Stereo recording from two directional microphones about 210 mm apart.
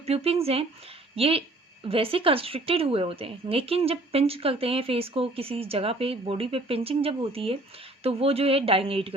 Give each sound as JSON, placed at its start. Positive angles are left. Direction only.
{"t": 0.0, "sound": "a woman's voice", "side_deg": -30}